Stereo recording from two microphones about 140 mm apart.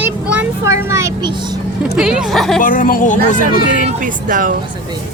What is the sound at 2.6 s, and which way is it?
Speech, 75° left (ahead or behind).